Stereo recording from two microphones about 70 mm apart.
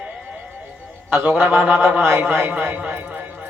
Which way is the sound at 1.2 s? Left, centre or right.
Right.